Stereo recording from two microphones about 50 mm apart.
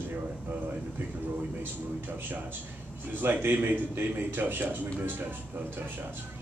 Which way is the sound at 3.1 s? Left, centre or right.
Right.